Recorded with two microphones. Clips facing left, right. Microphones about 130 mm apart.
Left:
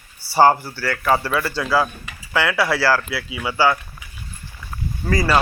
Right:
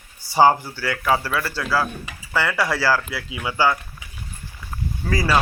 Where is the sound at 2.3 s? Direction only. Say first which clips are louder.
Left 2 dB; 10° left (ahead or behind).